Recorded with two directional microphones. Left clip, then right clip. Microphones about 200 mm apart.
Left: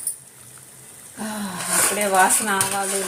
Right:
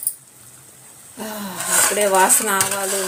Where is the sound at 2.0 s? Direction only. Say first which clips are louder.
Right 1 dB; 25° right (ahead or behind).